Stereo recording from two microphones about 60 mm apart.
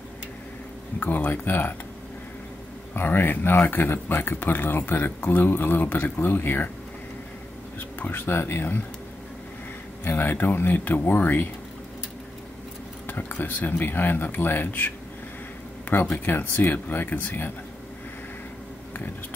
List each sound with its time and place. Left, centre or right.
0.9 s speech: left
2.9 s speech: left
8.0 s speech: left
10.0 s speech: left
13.0 s speech: left
15.9 s speech: left